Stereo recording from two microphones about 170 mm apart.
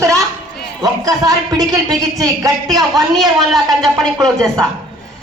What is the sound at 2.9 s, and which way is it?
Speech, centre (ahead or behind).